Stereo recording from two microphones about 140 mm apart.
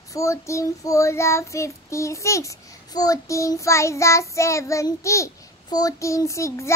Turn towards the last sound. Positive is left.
turn(degrees=20)  # may be behind; listen again after turning